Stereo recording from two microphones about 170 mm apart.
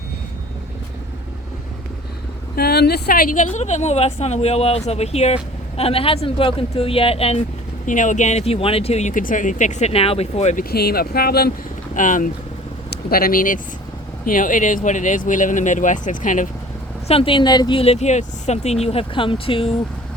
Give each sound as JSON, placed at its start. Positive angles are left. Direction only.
{"t": 2.6, "sound": "speech", "side_deg": 70}
{"t": 7.9, "sound": "speech", "side_deg": 50}
{"t": 10.7, "sound": "speech", "side_deg": 65}
{"t": 11.9, "sound": "speech", "side_deg": 50}
{"t": 12.9, "sound": "speech", "side_deg": 60}
{"t": 17.1, "sound": "speech", "side_deg": 30}